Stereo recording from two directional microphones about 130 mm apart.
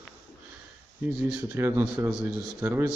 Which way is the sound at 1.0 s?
10° right (ahead or behind).